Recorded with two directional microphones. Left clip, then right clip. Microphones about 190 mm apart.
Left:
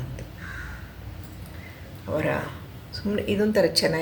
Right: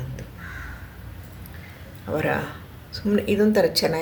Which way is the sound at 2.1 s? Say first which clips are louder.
Right 2 dB; 25° right (ahead or behind).